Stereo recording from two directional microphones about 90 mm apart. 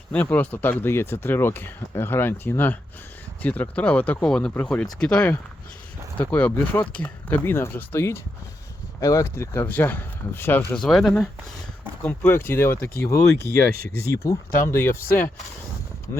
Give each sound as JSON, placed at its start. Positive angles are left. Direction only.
{"t": 0.1, "sound": "speech", "side_deg": 15}
{"t": 9.6, "sound": "speech", "side_deg": 20}
{"t": 10.8, "sound": "speech", "side_deg": 5}
{"t": 12.0, "sound": "speech", "side_deg": 25}